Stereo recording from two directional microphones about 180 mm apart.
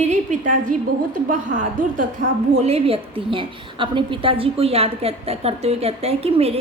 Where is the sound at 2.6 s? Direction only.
35° right (ahead or behind).